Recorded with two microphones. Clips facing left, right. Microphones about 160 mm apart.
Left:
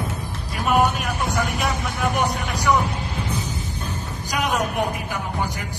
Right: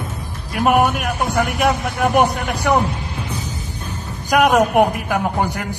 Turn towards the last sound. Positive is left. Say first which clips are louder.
# right 7 dB
turn(degrees=-60)  # may be behind; listen again after turning